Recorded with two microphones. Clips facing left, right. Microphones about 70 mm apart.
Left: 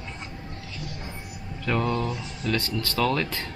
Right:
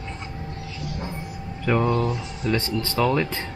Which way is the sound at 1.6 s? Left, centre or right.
Centre.